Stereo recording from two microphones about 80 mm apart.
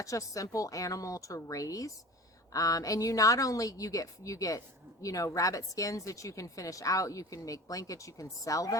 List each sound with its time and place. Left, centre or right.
0.0 s speech: left